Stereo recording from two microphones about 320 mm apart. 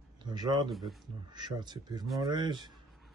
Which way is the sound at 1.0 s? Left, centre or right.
Centre.